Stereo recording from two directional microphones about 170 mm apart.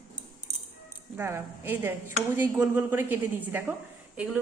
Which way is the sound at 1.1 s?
15° right (ahead or behind).